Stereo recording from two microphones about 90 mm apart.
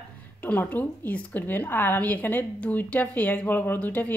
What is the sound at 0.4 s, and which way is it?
A woman's voice, 20° left (ahead or behind).